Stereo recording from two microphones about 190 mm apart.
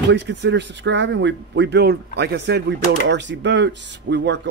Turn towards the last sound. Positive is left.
turn(degrees=-65)  # may be behind; listen again after turning